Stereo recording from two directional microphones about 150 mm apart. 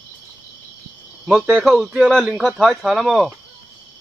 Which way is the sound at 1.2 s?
5° right (ahead or behind).